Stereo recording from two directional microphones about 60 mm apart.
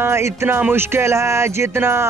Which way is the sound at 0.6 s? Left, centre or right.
Right.